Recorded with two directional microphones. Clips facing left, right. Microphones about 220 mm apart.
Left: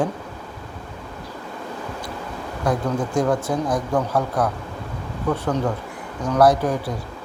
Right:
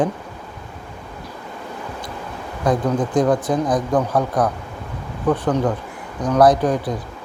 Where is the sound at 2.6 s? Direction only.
20° right (ahead or behind).